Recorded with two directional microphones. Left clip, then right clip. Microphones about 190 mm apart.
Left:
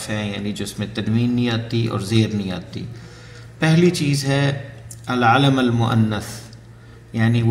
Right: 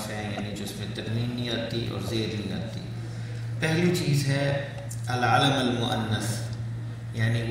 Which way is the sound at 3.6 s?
35° left (ahead or behind).